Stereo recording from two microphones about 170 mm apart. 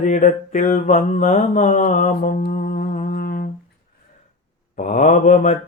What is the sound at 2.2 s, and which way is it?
Humming, 60° left (ahead or behind).